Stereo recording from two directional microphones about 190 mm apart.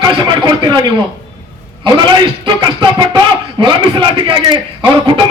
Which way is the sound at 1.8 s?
25° right (ahead or behind).